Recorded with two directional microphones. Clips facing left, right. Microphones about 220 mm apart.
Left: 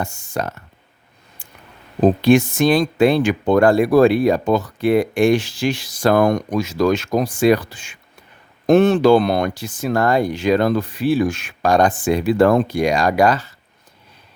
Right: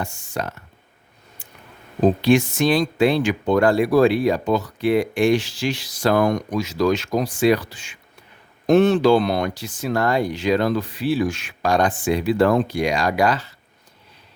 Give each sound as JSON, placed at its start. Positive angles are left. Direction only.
{"t": 0.0, "sound": "speech", "side_deg": 45}
{"t": 2.2, "sound": "speech", "side_deg": 50}